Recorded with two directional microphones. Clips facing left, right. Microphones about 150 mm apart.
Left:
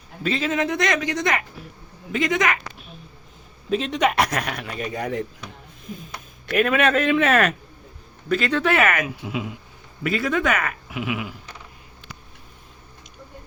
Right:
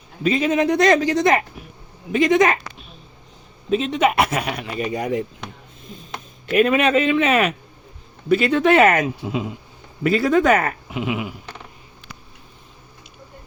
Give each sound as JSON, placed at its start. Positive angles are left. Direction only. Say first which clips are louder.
{"t": 0.2, "sound": "speech", "louder": "right 5 dB", "side_deg": -15}
{"t": 0.7, "sound": "speech", "louder": "right 7 dB", "side_deg": -30}
{"t": 3.7, "sound": "speech", "louder": "right 3 dB", "side_deg": 0}
{"t": 6.5, "sound": "a man's voice", "louder": "right 3 dB", "side_deg": 0}
{"t": 8.6, "sound": "speech", "louder": "right 6 dB", "side_deg": -25}